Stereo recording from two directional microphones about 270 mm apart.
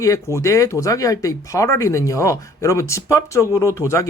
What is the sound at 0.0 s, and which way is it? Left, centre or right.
Speech, centre.